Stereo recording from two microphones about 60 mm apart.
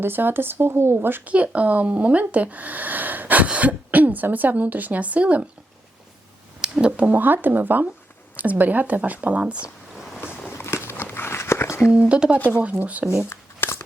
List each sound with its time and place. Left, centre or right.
0.0 s speech: right
1.3 s speech: right
6.6 s speech: centre
10.6 s a sound: left
11.9 s speech: right
13.3 s shuffling cards: left